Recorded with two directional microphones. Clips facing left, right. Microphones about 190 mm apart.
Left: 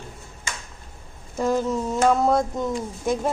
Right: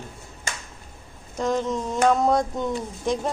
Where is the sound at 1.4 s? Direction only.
5° left (ahead or behind).